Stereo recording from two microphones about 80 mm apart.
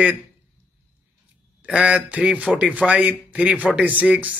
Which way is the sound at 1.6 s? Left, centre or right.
Centre.